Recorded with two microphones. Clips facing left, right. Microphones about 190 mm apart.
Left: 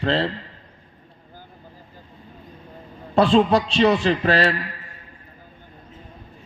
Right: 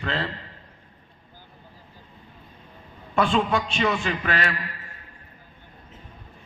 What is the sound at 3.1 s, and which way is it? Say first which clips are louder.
A man's voice: left 6 dB; 35° left (ahead or behind).